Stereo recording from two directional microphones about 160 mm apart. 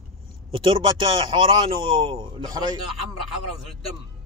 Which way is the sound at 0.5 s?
30° right (ahead or behind).